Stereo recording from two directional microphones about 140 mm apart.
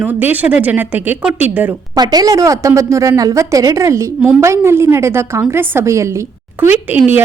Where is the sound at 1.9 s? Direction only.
30° right (ahead or behind).